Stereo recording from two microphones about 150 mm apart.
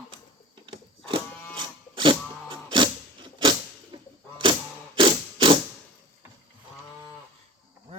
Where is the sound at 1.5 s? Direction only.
30° right (ahead or behind).